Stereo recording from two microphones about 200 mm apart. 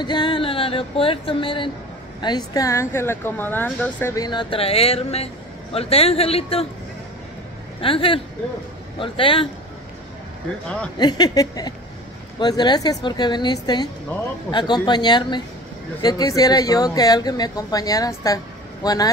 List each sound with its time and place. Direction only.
0.0 s speech: 25° left (ahead or behind)
7.8 s speech: 25° left (ahead or behind)
11.0 s speech: 20° left (ahead or behind)